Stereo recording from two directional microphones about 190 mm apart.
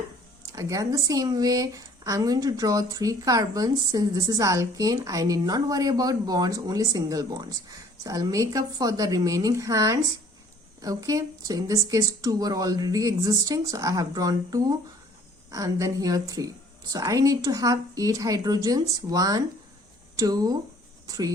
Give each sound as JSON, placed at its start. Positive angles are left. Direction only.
{"t": 0.5, "sound": "speech", "side_deg": -15}